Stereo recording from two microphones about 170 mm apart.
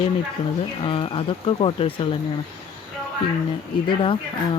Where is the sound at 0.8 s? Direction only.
30° left (ahead or behind).